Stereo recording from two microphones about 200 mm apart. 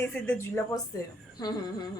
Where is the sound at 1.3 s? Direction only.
20° left (ahead or behind).